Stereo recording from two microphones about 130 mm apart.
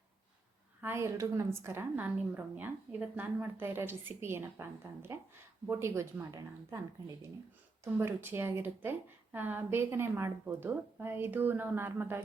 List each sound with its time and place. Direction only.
0.8 s a woman's voice: 20° right (ahead or behind)